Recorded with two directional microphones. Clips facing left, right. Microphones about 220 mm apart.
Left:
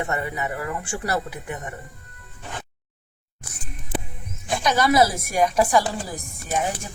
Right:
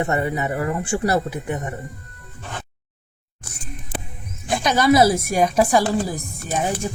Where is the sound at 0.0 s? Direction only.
30° right (ahead or behind).